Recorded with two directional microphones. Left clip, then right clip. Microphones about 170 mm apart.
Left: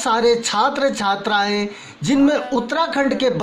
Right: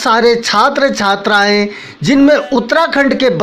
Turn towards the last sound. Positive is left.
turn(degrees=-20)  # may be behind; listen again after turning